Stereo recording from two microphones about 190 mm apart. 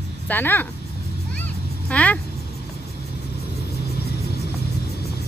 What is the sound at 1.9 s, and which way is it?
Speech, 5° left (ahead or behind).